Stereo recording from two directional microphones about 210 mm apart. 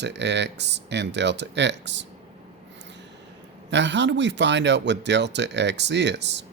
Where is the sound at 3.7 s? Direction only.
55° right (ahead or behind).